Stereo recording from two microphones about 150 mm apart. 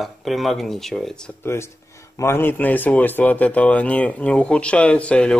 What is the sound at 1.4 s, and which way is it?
Speech, 15° left (ahead or behind).